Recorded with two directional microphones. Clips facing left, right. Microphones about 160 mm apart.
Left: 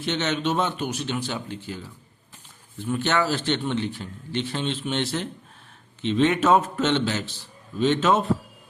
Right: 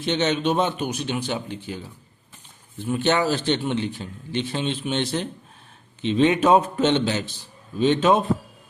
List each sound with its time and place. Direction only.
0.0 s a man's voice: 20° right (ahead or behind)